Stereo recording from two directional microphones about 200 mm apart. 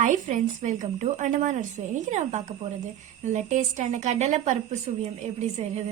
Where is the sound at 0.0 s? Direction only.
40° right (ahead or behind).